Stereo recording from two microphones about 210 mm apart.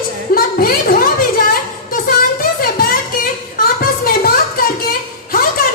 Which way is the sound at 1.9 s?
45° left (ahead or behind).